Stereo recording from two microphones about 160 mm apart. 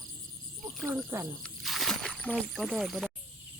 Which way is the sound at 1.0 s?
15° right (ahead or behind).